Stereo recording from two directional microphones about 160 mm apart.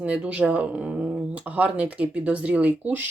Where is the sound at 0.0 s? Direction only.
5° right (ahead or behind).